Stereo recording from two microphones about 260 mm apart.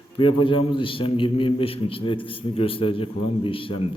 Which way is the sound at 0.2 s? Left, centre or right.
Centre.